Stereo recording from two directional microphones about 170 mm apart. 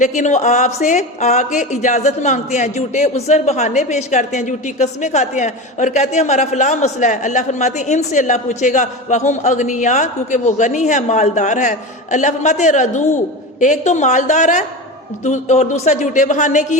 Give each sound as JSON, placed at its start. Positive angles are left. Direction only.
{"t": 0.0, "sound": "speech", "side_deg": 45}